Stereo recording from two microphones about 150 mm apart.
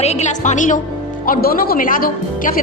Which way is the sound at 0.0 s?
45° left (ahead or behind).